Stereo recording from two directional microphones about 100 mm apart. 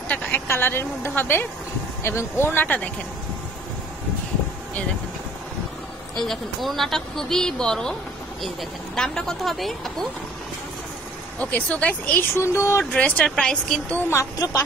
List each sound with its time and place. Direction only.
0.1 s a woman's voice: 20° left (ahead or behind)
6.2 s speech: centre (ahead or behind)
8.9 s speech: 5° left (ahead or behind)
11.3 s a woman's voice: 15° left (ahead or behind)
12.4 s speech: 30° left (ahead or behind)
12.9 s a woman's voice: 15° left (ahead or behind)
13.9 s speech: 20° left (ahead or behind)